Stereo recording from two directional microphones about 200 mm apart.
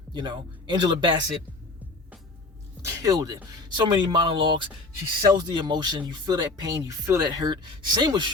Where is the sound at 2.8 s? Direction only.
15° right (ahead or behind).